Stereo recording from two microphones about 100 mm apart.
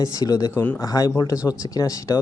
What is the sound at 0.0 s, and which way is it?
Speech, 35° left (ahead or behind).